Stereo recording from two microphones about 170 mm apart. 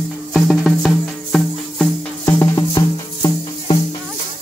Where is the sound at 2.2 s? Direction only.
20° left (ahead or behind).